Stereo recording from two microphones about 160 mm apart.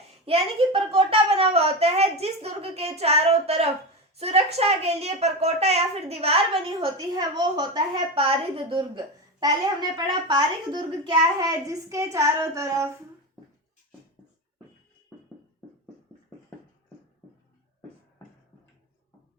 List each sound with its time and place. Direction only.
0.3 s a child's voice: 35° right (ahead or behind)
9.4 s a child's voice: 25° right (ahead or behind)